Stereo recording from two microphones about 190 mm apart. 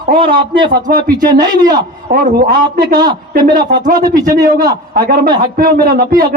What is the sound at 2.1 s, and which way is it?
Speech, 50° right (ahead or behind).